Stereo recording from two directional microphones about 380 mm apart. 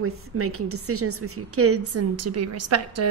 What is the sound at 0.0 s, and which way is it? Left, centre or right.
A woman's voice, right.